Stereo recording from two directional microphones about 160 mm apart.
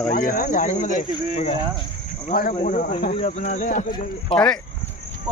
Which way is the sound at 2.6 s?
55° left (ahead or behind).